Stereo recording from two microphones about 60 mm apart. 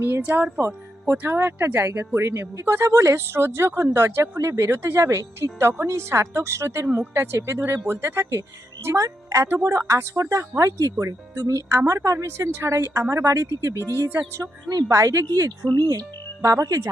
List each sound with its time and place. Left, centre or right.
0.0 s speech: right
9.0 s speech: right
9.5 s a woman's voice: right
11.0 s a woman's voice: right
11.8 s a woman's voice: right
14.1 s speech: right
14.7 s a woman's voice: right